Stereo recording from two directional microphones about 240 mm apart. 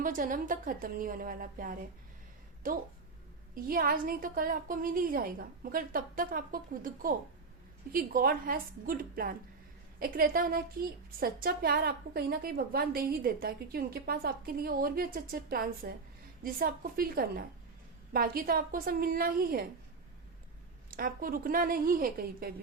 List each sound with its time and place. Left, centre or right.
0.0 s a woman's voice: right
20.9 s a woman's voice: right